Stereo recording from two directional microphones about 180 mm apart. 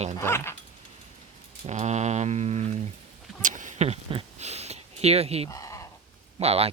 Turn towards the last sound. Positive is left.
turn(degrees=-35)  # may be behind; listen again after turning